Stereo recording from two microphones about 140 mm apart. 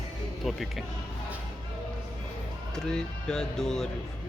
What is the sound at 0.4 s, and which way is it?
Speech, centre (ahead or behind).